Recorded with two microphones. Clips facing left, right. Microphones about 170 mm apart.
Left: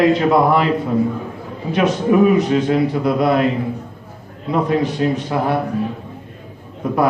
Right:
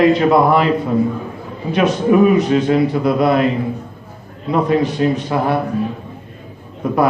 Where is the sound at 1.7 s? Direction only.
70° right (ahead or behind).